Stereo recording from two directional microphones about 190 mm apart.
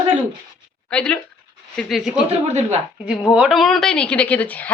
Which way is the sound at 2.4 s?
35° right (ahead or behind).